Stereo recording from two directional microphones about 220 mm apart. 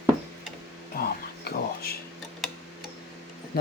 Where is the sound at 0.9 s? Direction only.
45° left (ahead or behind).